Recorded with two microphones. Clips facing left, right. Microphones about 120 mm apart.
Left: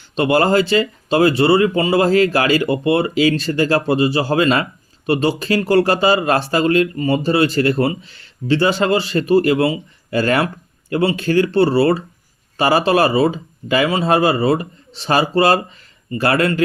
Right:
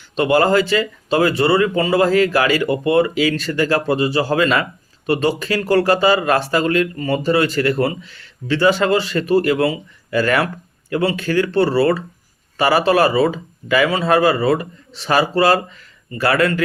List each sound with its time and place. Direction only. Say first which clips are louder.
0.3 s speech: left 1 dB; 30° left (ahead or behind)